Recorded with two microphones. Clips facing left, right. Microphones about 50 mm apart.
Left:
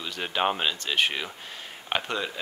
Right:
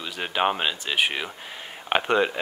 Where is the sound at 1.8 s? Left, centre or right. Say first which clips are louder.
Right 8 dB; right.